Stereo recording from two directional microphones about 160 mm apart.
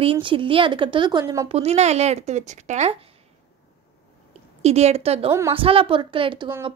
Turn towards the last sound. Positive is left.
turn(degrees=-30)  # may be behind; listen again after turning